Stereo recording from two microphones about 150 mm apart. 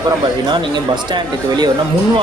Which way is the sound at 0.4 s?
30° right (ahead or behind).